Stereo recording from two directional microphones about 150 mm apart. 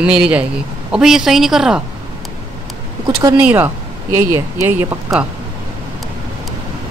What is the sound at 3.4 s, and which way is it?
Speech, 10° right (ahead or behind).